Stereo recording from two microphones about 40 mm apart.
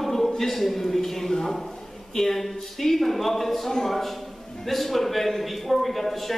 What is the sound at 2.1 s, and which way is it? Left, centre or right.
A man's voice, centre.